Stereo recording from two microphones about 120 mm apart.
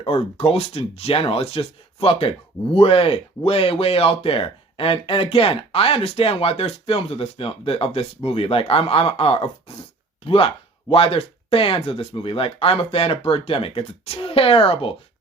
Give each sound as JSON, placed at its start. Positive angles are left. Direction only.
{"t": 0.0, "sound": "speech", "side_deg": 55}